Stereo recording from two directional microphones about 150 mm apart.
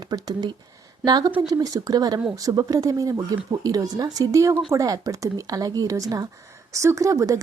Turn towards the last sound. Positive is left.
turn(degrees=-20)  # may be behind; listen again after turning